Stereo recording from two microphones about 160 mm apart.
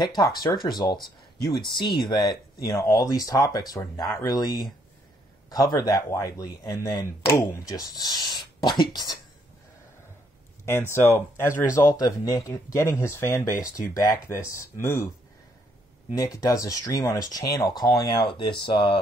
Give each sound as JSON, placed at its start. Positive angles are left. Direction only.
{"t": 0.0, "sound": "speech", "side_deg": 25}
{"t": 2.0, "sound": "speech", "side_deg": 25}
{"t": 10.6, "sound": "speech", "side_deg": 15}
{"t": 16.3, "sound": "speech", "side_deg": 20}